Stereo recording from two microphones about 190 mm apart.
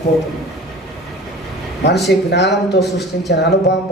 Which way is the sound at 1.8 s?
60° left (ahead or behind).